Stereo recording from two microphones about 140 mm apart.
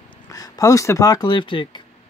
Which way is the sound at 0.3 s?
25° left (ahead or behind).